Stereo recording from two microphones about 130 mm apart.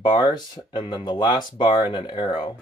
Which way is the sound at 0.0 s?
35° left (ahead or behind).